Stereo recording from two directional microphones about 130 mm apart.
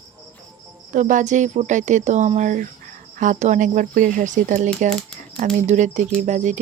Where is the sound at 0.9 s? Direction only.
75° right (ahead or behind).